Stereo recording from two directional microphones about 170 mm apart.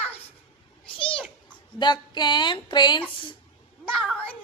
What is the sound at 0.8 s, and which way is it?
Cat, 30° left (ahead or behind).